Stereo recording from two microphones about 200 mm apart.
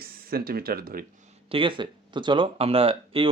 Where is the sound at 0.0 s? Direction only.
50° right (ahead or behind).